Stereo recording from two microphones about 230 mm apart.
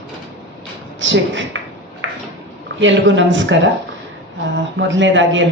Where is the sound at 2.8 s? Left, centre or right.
Right.